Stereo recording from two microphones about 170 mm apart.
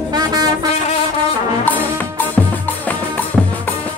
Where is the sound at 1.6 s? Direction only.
10° left (ahead or behind).